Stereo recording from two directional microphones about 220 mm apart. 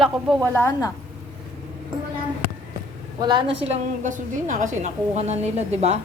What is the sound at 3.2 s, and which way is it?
A woman's voice, 20° right (ahead or behind).